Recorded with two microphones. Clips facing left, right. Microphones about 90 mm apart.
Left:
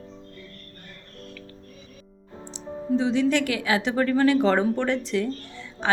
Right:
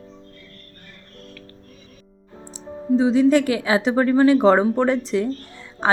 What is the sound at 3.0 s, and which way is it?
A woman's voice, 30° right (ahead or behind).